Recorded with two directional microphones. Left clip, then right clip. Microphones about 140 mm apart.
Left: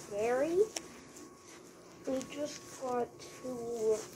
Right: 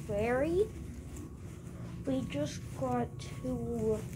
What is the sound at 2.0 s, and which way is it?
A woman's voice, centre (ahead or behind).